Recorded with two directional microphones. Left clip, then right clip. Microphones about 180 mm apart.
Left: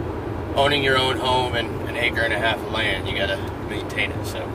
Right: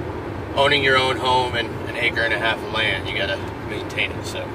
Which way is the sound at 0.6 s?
5° left (ahead or behind).